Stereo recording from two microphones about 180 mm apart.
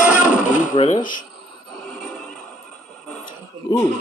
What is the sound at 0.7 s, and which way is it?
Speech, 40° left (ahead or behind).